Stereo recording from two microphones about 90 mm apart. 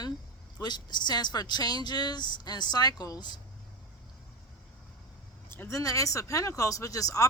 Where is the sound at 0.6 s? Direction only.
55° left (ahead or behind).